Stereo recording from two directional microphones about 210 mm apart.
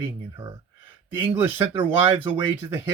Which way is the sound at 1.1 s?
10° right (ahead or behind).